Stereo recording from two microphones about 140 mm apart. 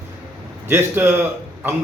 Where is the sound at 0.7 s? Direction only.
15° right (ahead or behind).